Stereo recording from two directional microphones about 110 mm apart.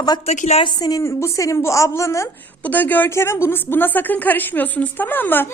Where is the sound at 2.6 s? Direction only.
15° left (ahead or behind).